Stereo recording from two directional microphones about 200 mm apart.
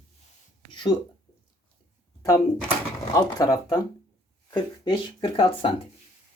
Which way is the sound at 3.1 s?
20° left (ahead or behind).